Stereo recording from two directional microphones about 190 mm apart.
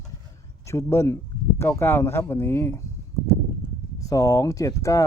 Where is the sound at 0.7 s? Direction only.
15° left (ahead or behind).